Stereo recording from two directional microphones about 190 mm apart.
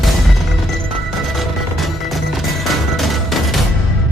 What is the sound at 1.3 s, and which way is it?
Music, centre (ahead or behind).